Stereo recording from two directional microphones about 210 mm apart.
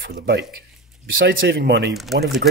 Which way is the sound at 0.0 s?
55° right (ahead or behind).